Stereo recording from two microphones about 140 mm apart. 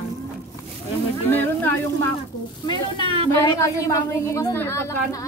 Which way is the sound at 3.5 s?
20° left (ahead or behind).